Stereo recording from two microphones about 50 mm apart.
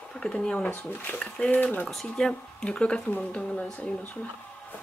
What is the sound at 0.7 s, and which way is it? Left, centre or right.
Speech, left.